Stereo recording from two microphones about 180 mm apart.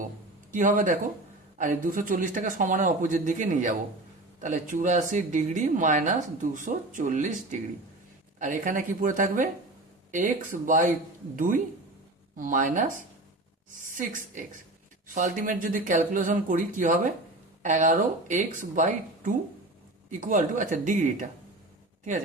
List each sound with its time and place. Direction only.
0.5 s speech: 45° right (ahead or behind)
13.9 s speech: 45° right (ahead or behind)